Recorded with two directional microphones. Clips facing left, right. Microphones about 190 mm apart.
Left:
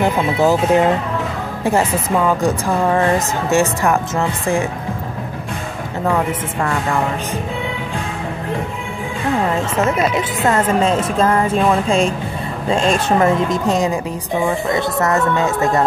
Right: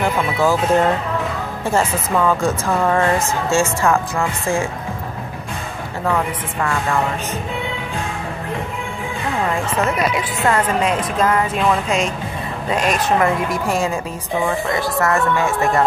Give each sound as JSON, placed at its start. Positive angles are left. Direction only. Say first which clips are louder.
{"t": 0.0, "sound": "a woman's voice", "louder": "left 3 dB", "side_deg": 20}
{"t": 6.6, "sound": "speech", "louder": "even", "side_deg": 20}
{"t": 9.6, "sound": "speech", "louder": "left 2 dB", "side_deg": 25}